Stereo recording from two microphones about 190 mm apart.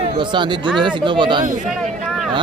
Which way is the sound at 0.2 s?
25° right (ahead or behind).